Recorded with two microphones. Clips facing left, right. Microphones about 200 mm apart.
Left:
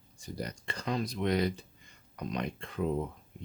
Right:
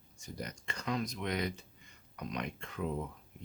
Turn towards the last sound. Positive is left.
turn(degrees=35)  # may be behind; listen again after turning